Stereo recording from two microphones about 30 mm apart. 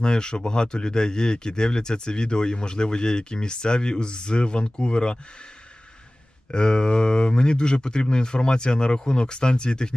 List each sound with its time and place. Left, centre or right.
0.0 s speech: left
6.5 s speech: left